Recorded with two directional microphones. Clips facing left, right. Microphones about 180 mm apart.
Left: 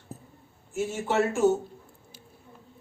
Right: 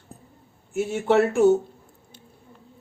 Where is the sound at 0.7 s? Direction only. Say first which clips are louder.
Right 7 dB; 65° right (ahead or behind).